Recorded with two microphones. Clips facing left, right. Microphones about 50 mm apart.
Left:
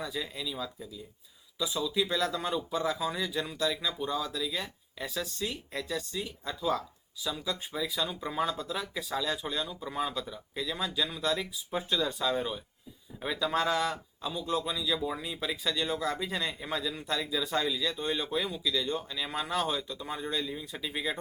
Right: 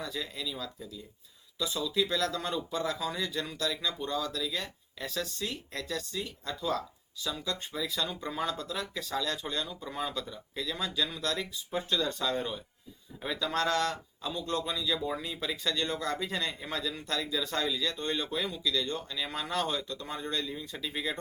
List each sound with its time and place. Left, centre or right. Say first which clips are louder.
0.0 s speech: left 1 dB; centre